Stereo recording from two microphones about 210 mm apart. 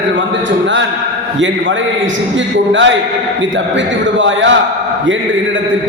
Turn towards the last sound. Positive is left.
turn(degrees=-60)  # may be behind; listen again after turning